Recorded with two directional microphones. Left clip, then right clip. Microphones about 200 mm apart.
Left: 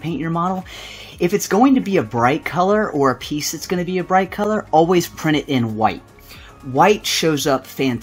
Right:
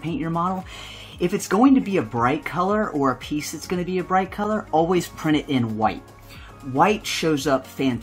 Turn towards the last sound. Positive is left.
turn(degrees=25)  # may be behind; listen again after turning